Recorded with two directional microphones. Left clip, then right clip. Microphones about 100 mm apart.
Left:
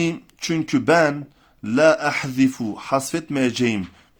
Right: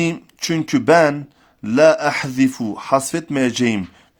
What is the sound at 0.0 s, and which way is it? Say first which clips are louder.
Speech: right 3 dB; 35° right (ahead or behind).